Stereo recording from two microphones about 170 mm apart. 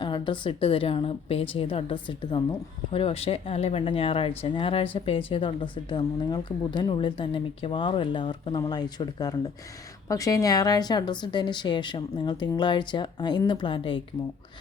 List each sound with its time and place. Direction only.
0.0 s a woman's voice: 30° left (ahead or behind)